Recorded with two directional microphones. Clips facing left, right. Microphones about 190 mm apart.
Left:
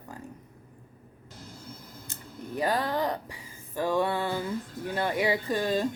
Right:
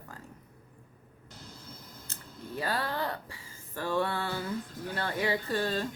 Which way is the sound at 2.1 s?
15° left (ahead or behind).